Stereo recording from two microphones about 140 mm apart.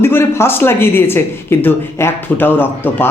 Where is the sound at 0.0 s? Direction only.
15° left (ahead or behind).